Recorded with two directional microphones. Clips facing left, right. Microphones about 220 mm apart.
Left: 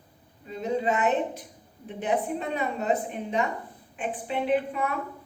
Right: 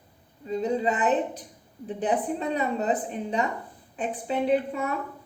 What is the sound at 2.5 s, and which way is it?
A woman's voice, 35° right (ahead or behind).